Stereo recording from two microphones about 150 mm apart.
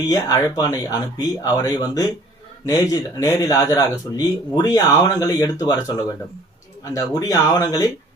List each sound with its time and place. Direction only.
0.1 s speech: 25° left (ahead or behind)